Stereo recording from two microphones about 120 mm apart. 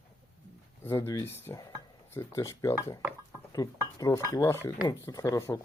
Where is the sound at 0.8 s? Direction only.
25° left (ahead or behind).